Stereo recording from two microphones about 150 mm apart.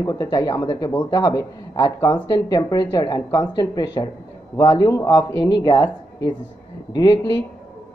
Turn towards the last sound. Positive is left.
turn(degrees=30)  # may be behind; listen again after turning